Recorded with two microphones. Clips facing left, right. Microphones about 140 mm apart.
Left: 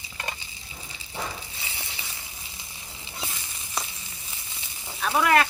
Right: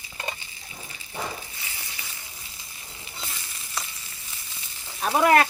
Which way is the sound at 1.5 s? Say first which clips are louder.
Left 2 dB; 25° left (ahead or behind).